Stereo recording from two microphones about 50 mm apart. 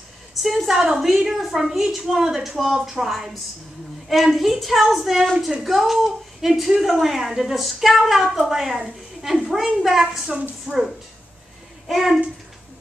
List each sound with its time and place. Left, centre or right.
0.4 s a woman's voice: centre
10.7 s a woman's voice: centre
11.9 s a woman's voice: centre